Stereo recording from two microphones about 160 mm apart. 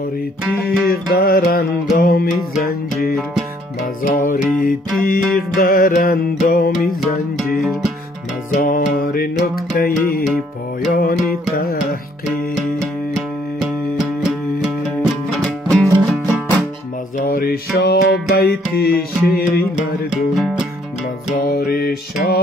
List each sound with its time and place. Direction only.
0.7 s music: 70° left (ahead or behind)
4.0 s music: 55° left (ahead or behind)
8.5 s music: 55° left (ahead or behind)
15.3 s music: centre (ahead or behind)
17.3 s music: 70° left (ahead or behind)
20.1 s music: centre (ahead or behind)
21.5 s music: 75° left (ahead or behind)
22.2 s music: 90° left